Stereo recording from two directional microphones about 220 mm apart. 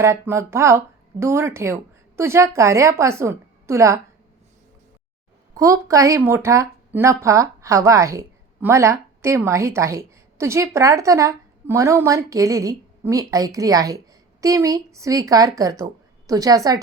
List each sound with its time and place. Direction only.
0.0 s a woman's voice: 10° right (ahead or behind)
5.5 s a woman's voice: 15° right (ahead or behind)